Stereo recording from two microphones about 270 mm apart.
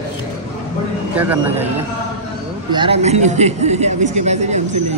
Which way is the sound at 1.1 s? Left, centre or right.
Centre.